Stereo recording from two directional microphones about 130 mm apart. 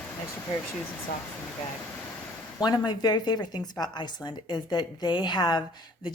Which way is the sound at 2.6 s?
30° left (ahead or behind).